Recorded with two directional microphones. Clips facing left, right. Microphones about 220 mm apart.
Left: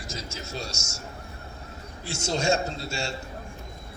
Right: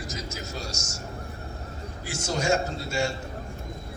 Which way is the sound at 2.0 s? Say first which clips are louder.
Left 1 dB; 25° left (ahead or behind).